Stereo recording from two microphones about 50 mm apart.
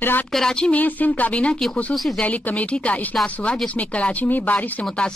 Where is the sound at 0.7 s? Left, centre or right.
Left.